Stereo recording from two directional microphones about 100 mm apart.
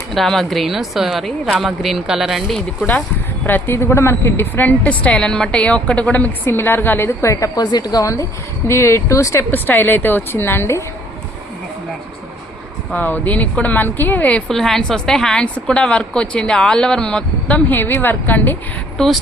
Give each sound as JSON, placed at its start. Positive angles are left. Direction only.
{"t": 0.1, "sound": "a woman's voice", "side_deg": 0}
{"t": 3.4, "sound": "a woman's voice", "side_deg": 20}
{"t": 12.9, "sound": "a woman's voice", "side_deg": 15}
{"t": 14.4, "sound": "a woman's voice", "side_deg": 5}
{"t": 18.9, "sound": "a woman's voice", "side_deg": 0}